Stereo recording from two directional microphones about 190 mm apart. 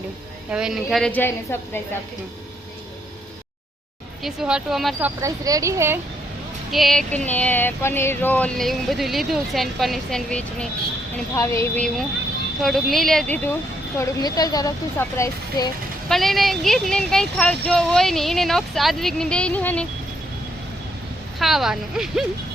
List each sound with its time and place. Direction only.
0.5 s speech: 5° right (ahead or behind)
4.2 s speech: 5° right (ahead or behind)
4.9 s speech: 15° right (ahead or behind)
6.7 s speech: centre (ahead or behind)
11.3 s speech: 15° left (ahead or behind)
14.0 s speech: 20° left (ahead or behind)
16.0 s speech: centre (ahead or behind)
21.3 s speech: centre (ahead or behind)